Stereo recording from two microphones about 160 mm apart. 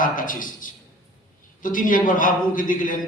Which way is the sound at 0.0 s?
55° left (ahead or behind).